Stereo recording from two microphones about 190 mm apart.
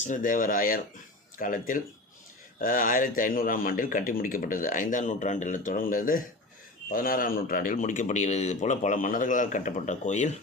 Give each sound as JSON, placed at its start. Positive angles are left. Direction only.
{"t": 0.0, "sound": "a man's voice", "side_deg": 40}